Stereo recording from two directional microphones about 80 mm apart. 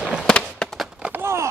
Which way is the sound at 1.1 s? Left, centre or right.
Right.